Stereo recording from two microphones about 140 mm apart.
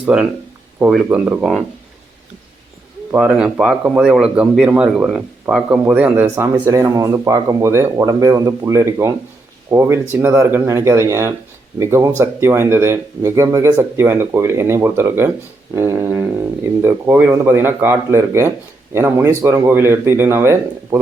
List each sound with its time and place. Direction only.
0.0 s speech: 5° right (ahead or behind)
3.1 s speech: 5° right (ahead or behind)